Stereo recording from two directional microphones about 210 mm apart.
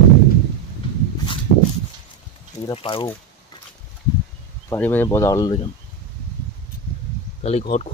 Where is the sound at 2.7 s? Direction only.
25° left (ahead or behind).